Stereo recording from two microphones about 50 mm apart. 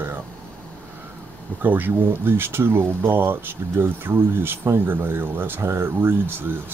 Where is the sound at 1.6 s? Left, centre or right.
Right.